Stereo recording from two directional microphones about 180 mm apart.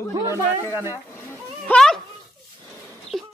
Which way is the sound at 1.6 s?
5° left (ahead or behind).